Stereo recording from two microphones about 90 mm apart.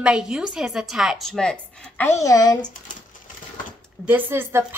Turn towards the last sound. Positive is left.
turn(degrees=-25)  # may be behind; listen again after turning